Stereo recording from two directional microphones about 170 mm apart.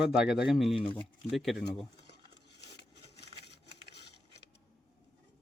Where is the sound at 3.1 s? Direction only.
75° left (ahead or behind).